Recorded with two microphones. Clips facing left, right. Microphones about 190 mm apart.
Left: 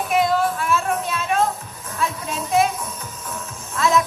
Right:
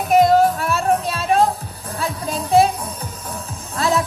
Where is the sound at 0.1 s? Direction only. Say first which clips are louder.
Right 7 dB; 40° right (ahead or behind).